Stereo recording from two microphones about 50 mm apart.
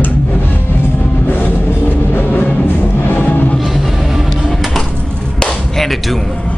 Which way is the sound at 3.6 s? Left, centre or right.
Centre.